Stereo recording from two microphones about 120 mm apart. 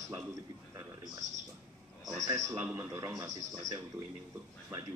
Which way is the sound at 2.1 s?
30° right (ahead or behind).